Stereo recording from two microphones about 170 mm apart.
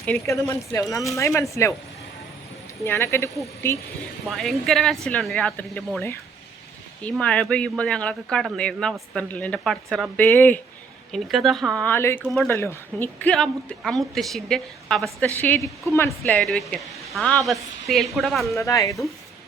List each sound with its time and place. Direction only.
0.3 s speech: 15° left (ahead or behind)
2.8 s speech: 15° left (ahead or behind)
4.3 s speech: centre (ahead or behind)
11.1 s speech: centre (ahead or behind)
12.2 s speech: centre (ahead or behind)
12.5 s speech: 15° left (ahead or behind)
18.5 s speech: 20° left (ahead or behind)